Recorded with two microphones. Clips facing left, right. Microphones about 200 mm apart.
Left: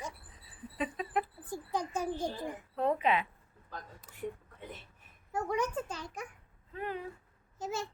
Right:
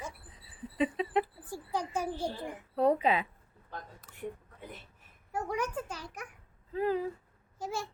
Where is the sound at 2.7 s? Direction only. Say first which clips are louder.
Right 3 dB; 35° right (ahead or behind).